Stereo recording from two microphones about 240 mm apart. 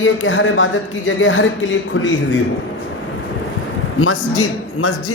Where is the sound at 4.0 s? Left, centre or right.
Left.